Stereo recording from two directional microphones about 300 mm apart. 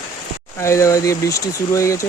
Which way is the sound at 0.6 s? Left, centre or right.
Centre.